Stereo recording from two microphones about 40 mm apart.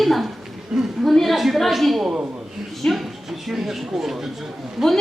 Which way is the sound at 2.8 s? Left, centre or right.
Left.